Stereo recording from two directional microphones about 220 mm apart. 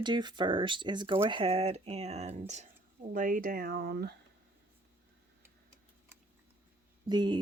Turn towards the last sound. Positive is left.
turn(degrees=-20)  # may be behind; listen again after turning